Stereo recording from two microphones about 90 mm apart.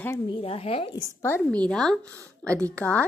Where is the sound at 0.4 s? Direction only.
90° left.